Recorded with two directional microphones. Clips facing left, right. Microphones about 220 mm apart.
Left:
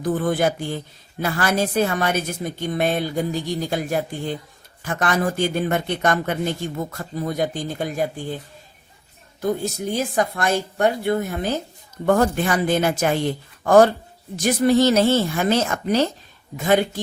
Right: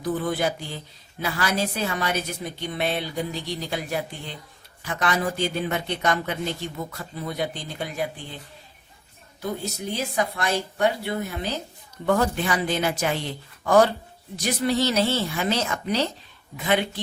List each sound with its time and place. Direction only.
0.0 s speech: 50° left (ahead or behind)
9.4 s speech: 50° left (ahead or behind)